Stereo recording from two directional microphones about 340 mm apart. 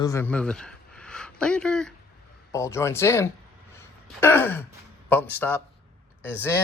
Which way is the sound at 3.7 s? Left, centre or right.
Centre.